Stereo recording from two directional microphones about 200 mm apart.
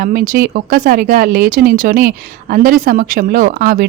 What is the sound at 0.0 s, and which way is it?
Speech, 45° right (ahead or behind).